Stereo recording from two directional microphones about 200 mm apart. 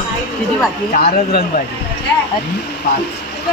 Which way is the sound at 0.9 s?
50° left (ahead or behind).